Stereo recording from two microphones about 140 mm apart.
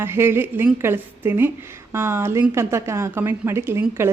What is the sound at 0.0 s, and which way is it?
A woman's voice, 15° right (ahead or behind).